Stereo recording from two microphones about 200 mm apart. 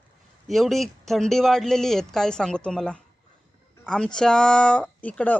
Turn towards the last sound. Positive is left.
turn(degrees=5)  # may be behind; listen again after turning